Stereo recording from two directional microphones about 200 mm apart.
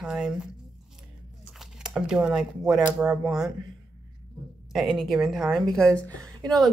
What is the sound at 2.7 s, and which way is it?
Speech, 5° right (ahead or behind).